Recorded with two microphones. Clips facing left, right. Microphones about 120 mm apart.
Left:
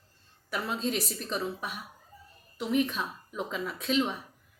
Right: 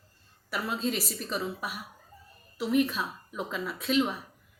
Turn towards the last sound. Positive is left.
turn(degrees=-5)  # may be behind; listen again after turning